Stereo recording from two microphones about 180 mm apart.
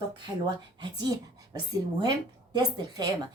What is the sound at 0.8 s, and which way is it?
Speech, 25° right (ahead or behind).